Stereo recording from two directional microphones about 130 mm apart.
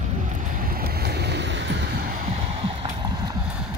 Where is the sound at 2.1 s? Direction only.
90° right.